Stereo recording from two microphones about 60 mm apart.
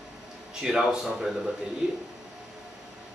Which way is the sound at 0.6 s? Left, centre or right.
Centre.